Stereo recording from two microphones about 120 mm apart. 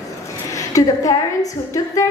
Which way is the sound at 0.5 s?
30° left (ahead or behind).